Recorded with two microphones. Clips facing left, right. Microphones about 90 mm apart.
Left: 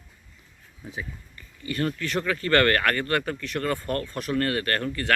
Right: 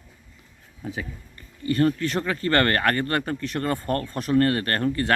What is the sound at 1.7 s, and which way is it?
Speech, 35° right (ahead or behind).